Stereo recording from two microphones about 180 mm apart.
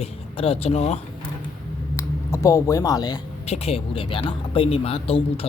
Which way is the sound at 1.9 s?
15° left (ahead or behind).